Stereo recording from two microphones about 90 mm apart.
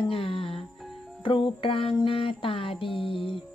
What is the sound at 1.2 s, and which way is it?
Speech, 75° left (ahead or behind).